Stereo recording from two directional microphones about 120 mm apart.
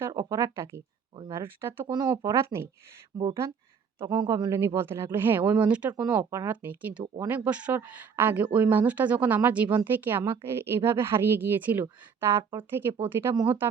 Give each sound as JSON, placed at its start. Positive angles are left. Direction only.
{"t": 0.1, "sound": "speech", "side_deg": -30}
{"t": 1.9, "sound": "speech", "side_deg": -35}
{"t": 4.0, "sound": "speech", "side_deg": -35}
{"t": 4.6, "sound": "speech", "side_deg": -20}
{"t": 6.1, "sound": "speech", "side_deg": -20}